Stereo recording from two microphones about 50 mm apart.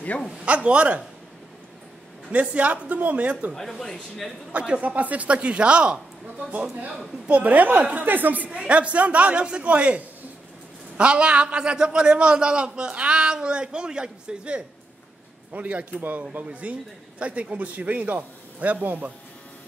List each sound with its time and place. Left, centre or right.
0.5 s a man's voice: right
2.3 s a man's voice: right
3.5 s speech: centre
4.5 s a man's voice: right
8.5 s a man's voice: right